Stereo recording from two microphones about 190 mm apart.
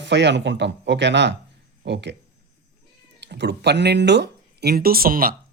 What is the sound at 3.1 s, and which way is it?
Speech, 65° right (ahead or behind).